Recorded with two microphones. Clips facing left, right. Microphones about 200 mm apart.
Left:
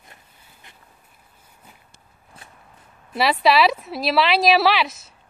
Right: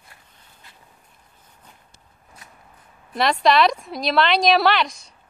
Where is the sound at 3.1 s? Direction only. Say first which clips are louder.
Even; 5° left (ahead or behind).